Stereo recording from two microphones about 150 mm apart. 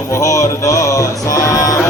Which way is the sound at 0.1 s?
20° left (ahead or behind).